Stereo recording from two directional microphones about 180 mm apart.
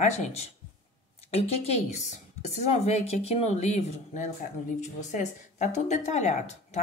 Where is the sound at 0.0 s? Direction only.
40° left (ahead or behind).